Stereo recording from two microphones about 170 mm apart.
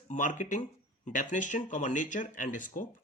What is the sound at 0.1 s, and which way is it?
Speech, 50° left (ahead or behind).